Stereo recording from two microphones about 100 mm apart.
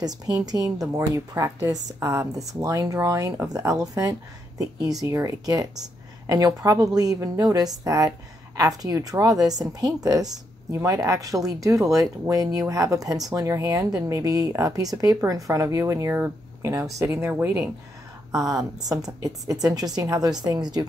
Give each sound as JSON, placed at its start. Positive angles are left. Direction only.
{"t": 0.0, "sound": "a woman's voice", "side_deg": -40}
{"t": 17.3, "sound": "speech", "side_deg": -15}
{"t": 18.3, "sound": "a woman's voice", "side_deg": -40}